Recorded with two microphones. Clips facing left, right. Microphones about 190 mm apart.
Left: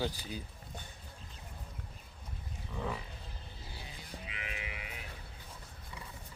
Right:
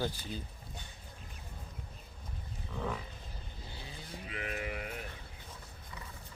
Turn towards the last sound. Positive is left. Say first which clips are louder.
# right 7 dB
turn(degrees=-50)  # may be behind; listen again after turning